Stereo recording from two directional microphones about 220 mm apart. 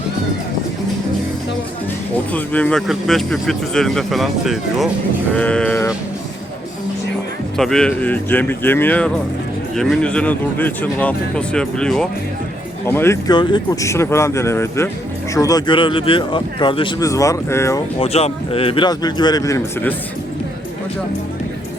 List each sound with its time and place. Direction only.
2.3 s speech: 5° left (ahead or behind)
7.5 s speech: centre (ahead or behind)
18.0 s speech: 25° left (ahead or behind)